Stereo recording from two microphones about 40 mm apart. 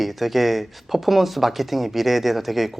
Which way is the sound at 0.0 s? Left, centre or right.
Centre.